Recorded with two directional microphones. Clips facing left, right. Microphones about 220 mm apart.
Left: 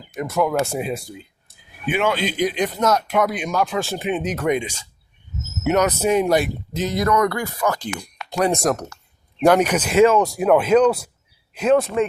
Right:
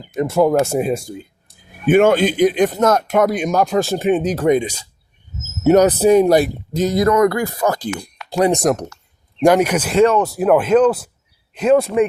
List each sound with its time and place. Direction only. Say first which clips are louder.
0.2 s speech: right 6 dB; 30° right (ahead or behind)
0.6 s speech: right 6 dB; 45° right (ahead or behind); by 8.4 s 30° right (ahead or behind)
8.4 s speech: right 3 dB; 15° right (ahead or behind)
9.8 s speech: right 1 dB; 5° left (ahead or behind)